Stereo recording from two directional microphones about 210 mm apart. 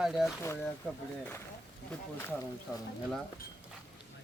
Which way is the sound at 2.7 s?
Centre (ahead or behind).